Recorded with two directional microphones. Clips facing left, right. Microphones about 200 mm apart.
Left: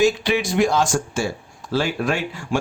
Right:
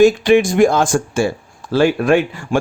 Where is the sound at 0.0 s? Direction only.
50° right (ahead or behind).